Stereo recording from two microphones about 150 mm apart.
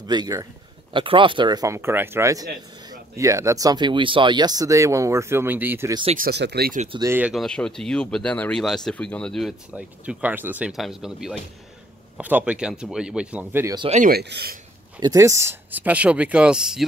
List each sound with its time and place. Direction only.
0.0 s a man's voice: 30° right (ahead or behind)
6.1 s speech: 85° right
7.1 s speech: 10° right (ahead or behind)
7.3 s speech: 5° left (ahead or behind)
9.7 s speech: 10° right (ahead or behind)
13.8 s speech: 50° right (ahead or behind)
14.1 s speech: 90° right
15.0 s speech: 25° right (ahead or behind); by 16.8 s 5° right (ahead or behind)